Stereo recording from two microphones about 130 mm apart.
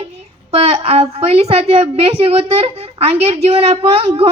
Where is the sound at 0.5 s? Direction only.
55° right (ahead or behind).